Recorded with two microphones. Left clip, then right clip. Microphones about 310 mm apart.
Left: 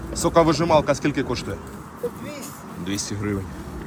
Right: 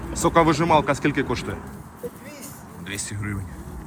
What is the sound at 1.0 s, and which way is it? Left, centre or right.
Speech, left.